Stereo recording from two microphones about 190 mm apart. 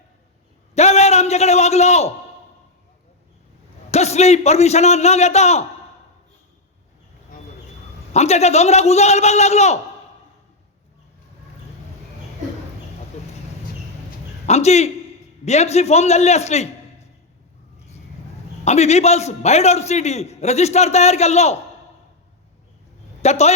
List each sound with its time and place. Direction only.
0.7 s a sound: 35° left (ahead or behind)
3.9 s a man's voice: 35° left (ahead or behind)
8.1 s a man's voice: 35° left (ahead or behind)
14.4 s a man's voice: 35° left (ahead or behind)
18.6 s a man's voice: 35° left (ahead or behind)
23.2 s a man's voice: 35° left (ahead or behind)